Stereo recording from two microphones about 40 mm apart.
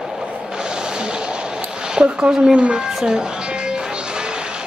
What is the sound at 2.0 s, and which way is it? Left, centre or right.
Speech, right.